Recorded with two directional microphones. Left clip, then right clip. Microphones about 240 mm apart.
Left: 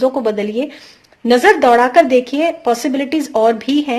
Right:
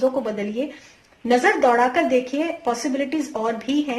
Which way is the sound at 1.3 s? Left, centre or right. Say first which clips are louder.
Left 7 dB; left.